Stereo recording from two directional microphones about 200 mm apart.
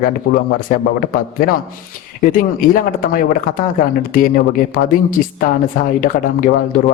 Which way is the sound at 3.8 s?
45° left (ahead or behind).